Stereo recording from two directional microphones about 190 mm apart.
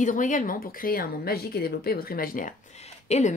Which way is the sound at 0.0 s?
45° left (ahead or behind).